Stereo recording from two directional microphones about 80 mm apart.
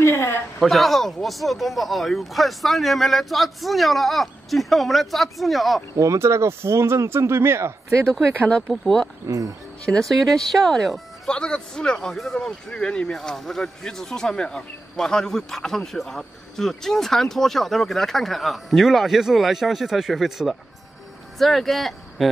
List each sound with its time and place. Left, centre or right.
0.0 s a sound: left
0.6 s speech: centre
5.9 s speech: right
8.4 s speech: centre